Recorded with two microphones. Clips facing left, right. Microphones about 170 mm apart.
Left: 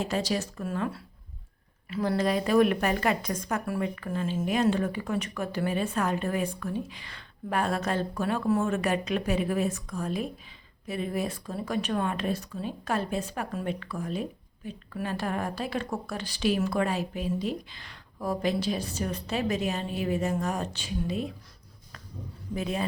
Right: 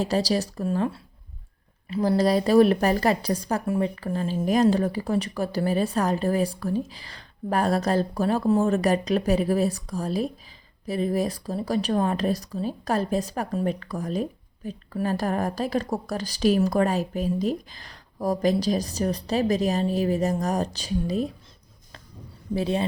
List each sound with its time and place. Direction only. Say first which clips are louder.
0.0 s speech: right 5 dB; 35° right (ahead or behind)
22.5 s speech: right 5 dB; 30° right (ahead or behind)